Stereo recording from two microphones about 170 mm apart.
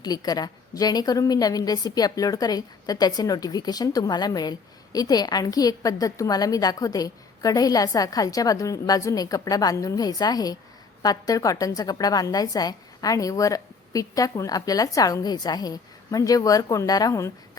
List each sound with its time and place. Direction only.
0.0 s a woman's voice: 20° left (ahead or behind)